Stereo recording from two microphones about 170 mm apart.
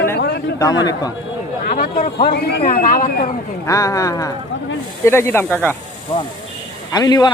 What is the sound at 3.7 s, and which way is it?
A man's voice, 20° left (ahead or behind).